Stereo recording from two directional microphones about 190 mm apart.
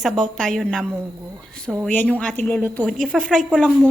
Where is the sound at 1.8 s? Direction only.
5° left (ahead or behind).